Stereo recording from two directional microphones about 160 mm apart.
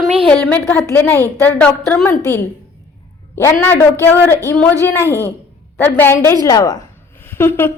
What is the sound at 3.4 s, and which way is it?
A woman's voice, 15° left (ahead or behind).